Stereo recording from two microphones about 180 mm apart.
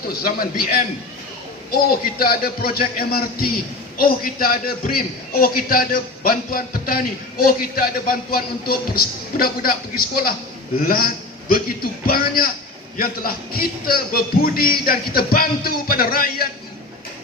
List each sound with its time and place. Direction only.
0.2 s a man's voice: 55° left (ahead or behind)